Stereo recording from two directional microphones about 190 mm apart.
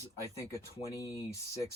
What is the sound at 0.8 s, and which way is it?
Speech, 15° left (ahead or behind).